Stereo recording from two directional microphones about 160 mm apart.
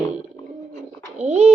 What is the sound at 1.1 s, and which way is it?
Speech, 45° right (ahead or behind).